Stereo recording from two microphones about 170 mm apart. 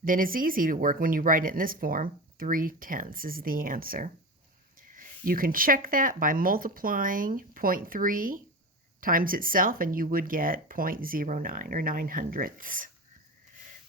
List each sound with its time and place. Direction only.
0.0 s speech: 55° right (ahead or behind)